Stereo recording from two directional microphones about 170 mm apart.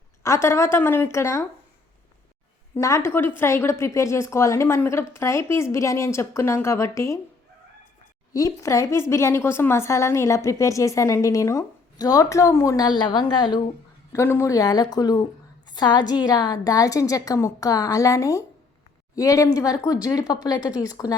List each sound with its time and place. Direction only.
0.2 s a woman's voice: 15° left (ahead or behind)
2.7 s a woman's voice: 15° left (ahead or behind)
8.3 s a woman's voice: 20° left (ahead or behind)
14.1 s a woman's voice: 15° left (ahead or behind)